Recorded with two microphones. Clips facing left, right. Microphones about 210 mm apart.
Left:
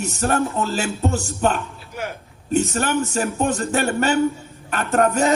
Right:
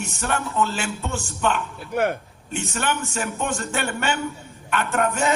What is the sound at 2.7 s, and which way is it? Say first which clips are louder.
Speech: left 5 dB; 40° left (ahead or behind).